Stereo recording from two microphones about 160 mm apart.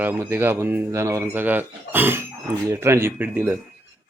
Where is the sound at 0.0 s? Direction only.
15° right (ahead or behind).